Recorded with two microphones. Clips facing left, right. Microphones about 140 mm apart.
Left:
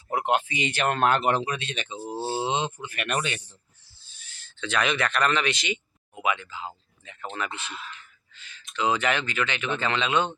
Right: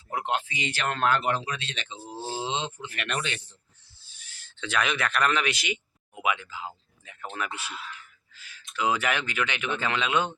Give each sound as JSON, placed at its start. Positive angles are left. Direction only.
{"t": 0.1, "sound": "speech", "side_deg": 15}
{"t": 2.0, "sound": "a sound", "side_deg": 50}
{"t": 2.6, "sound": "speech", "side_deg": 15}
{"t": 4.1, "sound": "a man's voice", "side_deg": -15}